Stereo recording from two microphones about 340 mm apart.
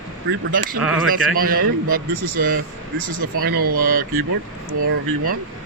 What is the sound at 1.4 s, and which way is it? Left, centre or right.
Speech, right.